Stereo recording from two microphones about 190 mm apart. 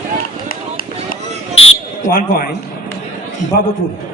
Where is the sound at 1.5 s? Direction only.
90° left.